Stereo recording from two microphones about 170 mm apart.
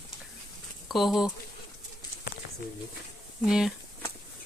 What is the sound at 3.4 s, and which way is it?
Speech, 5° right (ahead or behind).